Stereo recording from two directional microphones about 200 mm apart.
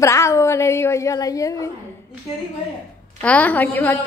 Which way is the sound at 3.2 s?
5° left (ahead or behind).